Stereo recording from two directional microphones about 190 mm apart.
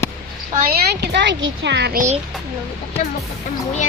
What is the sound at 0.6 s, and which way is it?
A woman's voice, 55° right (ahead or behind).